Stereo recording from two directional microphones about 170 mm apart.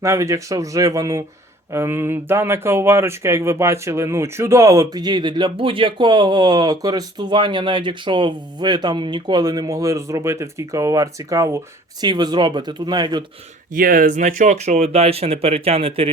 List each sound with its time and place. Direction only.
0.0 s speech: 20° right (ahead or behind)
13.7 s speech: 55° right (ahead or behind); by 16.0 s 35° right (ahead or behind)